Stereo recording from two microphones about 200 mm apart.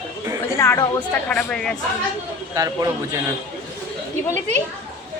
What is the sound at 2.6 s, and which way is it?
Speech, 15° right (ahead or behind).